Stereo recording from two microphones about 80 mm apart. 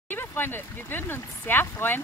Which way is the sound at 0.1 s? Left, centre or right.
Left.